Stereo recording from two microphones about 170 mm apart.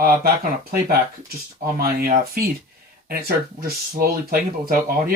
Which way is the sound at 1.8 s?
60° right (ahead or behind).